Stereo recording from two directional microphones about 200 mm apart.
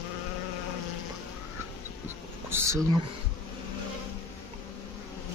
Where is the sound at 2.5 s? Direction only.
15° right (ahead or behind).